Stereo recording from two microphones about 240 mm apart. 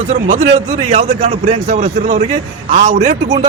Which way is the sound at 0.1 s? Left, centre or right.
Right.